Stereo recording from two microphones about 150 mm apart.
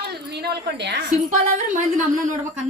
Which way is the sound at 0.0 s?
90° right.